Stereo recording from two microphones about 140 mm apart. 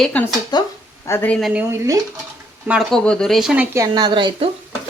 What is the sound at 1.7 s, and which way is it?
Speech, 25° right (ahead or behind).